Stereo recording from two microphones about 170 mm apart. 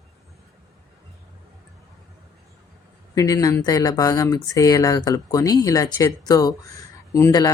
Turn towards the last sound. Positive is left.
turn(degrees=20)  # may be behind; listen again after turning